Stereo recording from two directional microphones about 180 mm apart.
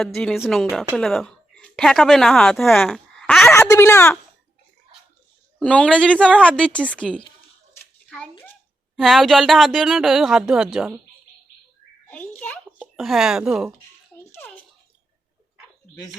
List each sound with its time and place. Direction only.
0.0 s a woman's voice: centre (ahead or behind)
3.5 s speech: 15° left (ahead or behind)
5.5 s speech: 5° left (ahead or behind)
8.1 s a sound: 10° left (ahead or behind)
9.0 s speech: centre (ahead or behind)
12.0 s a sound: 10° left (ahead or behind)
13.0 s speech: centre (ahead or behind)
14.3 s bathtub: 10° left (ahead or behind)